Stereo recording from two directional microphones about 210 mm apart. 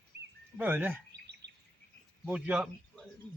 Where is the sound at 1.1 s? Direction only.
55° right (ahead or behind).